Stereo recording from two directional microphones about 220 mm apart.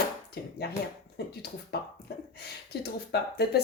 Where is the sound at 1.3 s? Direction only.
45° left (ahead or behind).